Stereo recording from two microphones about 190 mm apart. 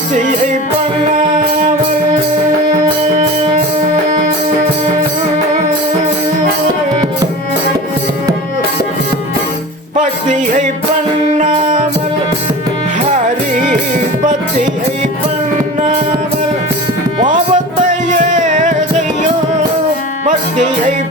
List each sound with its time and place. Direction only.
9.9 s music: 40° right (ahead or behind)
13.1 s music: 40° right (ahead or behind)
17.5 s music: 40° right (ahead or behind)
20.2 s music: 40° right (ahead or behind)